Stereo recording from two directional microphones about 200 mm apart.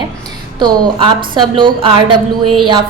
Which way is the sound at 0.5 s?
20° right (ahead or behind).